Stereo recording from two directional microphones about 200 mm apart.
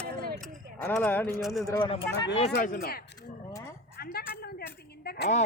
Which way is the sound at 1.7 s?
25° left (ahead or behind).